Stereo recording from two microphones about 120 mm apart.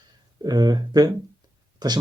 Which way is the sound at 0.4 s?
35° right (ahead or behind).